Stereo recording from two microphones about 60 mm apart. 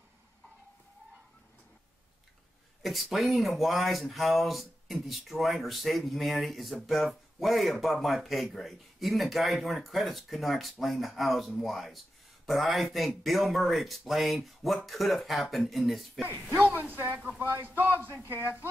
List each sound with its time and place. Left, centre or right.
2.8 s speech: centre
16.4 s speech: right